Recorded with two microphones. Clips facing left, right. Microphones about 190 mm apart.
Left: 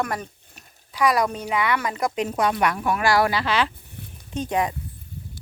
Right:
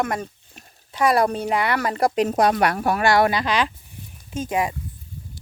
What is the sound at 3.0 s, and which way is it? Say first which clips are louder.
Speech: right 2 dB; 25° right (ahead or behind).